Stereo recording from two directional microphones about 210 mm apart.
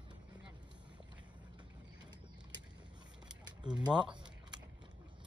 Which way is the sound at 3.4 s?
20° right (ahead or behind).